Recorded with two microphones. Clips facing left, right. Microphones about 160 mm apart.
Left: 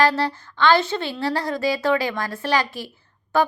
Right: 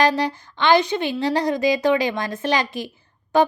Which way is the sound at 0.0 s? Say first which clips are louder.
Right 1 dB; 15° right (ahead or behind).